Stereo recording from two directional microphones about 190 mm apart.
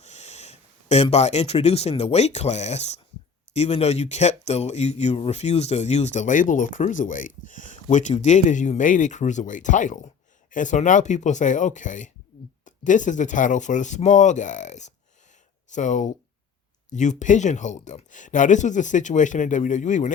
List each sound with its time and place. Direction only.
0.0 s speech: 35° left (ahead or behind)